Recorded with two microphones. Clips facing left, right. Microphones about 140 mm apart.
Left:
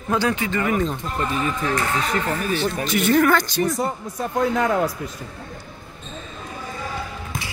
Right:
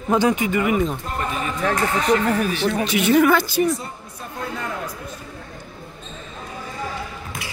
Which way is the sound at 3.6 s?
90° left.